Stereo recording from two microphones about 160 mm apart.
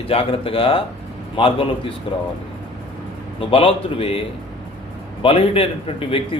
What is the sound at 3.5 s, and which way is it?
Speech, 35° left (ahead or behind).